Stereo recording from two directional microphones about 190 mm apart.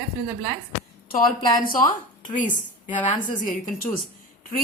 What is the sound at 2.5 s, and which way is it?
A woman's voice, 40° left (ahead or behind).